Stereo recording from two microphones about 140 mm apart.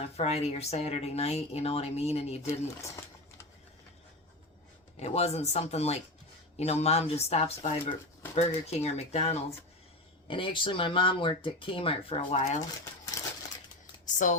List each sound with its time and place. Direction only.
0.2 s speech: 50° left (ahead or behind)
2.5 s speech: 20° left (ahead or behind)
4.9 s speech: 50° left (ahead or behind)
10.2 s speech: 35° left (ahead or behind); by 12.6 s 55° left (ahead or behind)
12.8 s a sound: 20° left (ahead or behind)
14.0 s speech: 65° left (ahead or behind)